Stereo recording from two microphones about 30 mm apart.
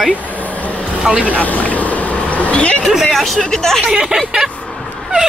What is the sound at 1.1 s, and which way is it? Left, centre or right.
Speech, right.